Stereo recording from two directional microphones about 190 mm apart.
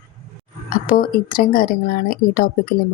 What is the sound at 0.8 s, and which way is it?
Speech, 50° left (ahead or behind).